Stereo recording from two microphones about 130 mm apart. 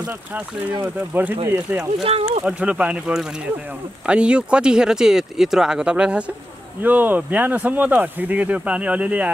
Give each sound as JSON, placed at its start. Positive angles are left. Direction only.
{"t": 1.1, "sound": "speech", "side_deg": -15}
{"t": 2.0, "sound": "speech", "side_deg": -50}
{"t": 2.4, "sound": "speech", "side_deg": -10}